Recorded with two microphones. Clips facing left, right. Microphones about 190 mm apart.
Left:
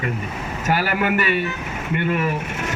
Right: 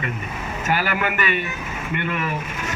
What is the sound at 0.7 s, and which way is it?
Speech, 40° left (ahead or behind).